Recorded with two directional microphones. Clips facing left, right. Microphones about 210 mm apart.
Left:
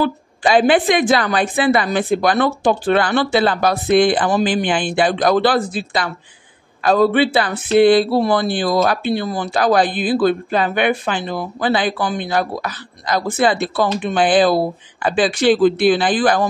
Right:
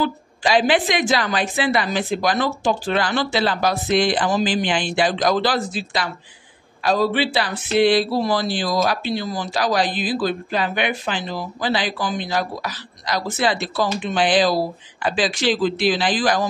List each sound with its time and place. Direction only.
0.6 s speech: 55° left (ahead or behind)